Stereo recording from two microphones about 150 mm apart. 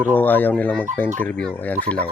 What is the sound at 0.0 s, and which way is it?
Speech, 10° left (ahead or behind).